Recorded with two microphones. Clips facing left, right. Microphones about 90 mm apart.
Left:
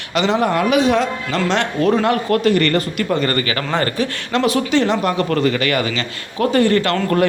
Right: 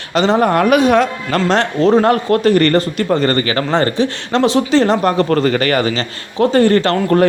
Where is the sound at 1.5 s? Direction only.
35° right (ahead or behind).